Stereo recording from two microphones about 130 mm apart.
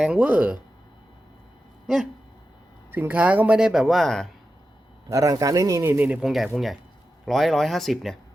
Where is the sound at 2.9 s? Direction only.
15° right (ahead or behind); by 4.2 s centre (ahead or behind).